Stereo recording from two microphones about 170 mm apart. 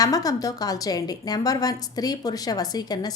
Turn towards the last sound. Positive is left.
turn(degrees=25)  # may be behind; listen again after turning